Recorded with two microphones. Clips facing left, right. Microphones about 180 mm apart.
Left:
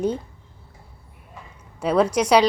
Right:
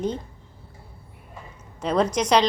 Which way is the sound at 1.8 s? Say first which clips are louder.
Left 3 dB; 10° left (ahead or behind).